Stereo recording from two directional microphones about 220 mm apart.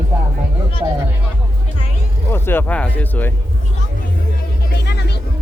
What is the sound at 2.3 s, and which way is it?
Speech, 10° left (ahead or behind).